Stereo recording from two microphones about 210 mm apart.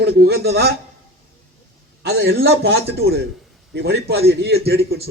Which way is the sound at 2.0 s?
50° right (ahead or behind).